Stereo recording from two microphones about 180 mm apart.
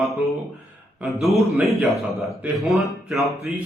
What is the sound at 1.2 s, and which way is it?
A man's voice, centre (ahead or behind).